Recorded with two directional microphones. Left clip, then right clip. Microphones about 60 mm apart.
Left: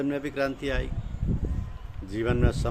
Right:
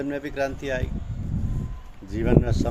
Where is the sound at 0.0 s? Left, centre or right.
Left.